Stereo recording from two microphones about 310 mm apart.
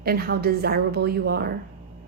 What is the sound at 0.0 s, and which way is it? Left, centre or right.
A woman's voice, right.